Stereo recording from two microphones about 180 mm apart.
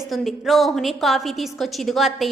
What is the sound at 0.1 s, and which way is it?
A woman's voice, centre (ahead or behind).